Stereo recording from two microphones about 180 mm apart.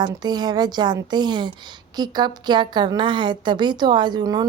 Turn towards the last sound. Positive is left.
turn(degrees=-20)  # may be behind; listen again after turning